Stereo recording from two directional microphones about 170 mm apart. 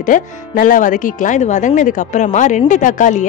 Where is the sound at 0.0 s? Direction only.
50° left (ahead or behind).